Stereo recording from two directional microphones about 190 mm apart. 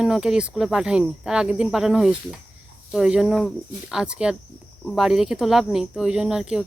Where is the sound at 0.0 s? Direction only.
5° right (ahead or behind).